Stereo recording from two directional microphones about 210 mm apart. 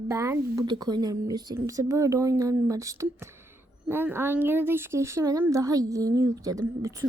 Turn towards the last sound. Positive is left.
turn(degrees=-15)  # may be behind; listen again after turning